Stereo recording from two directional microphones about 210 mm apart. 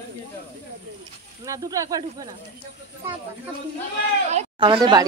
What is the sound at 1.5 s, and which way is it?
Speech, 15° right (ahead or behind).